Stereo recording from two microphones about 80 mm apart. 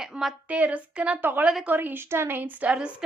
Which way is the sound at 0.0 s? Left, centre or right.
Centre.